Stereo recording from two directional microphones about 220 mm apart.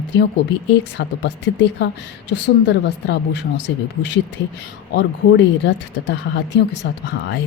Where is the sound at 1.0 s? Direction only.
50° left (ahead or behind).